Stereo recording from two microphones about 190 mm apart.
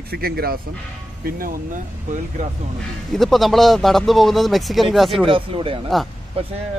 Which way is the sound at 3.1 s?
Centre (ahead or behind).